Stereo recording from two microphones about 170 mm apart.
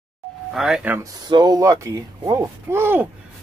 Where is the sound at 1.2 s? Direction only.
25° right (ahead or behind).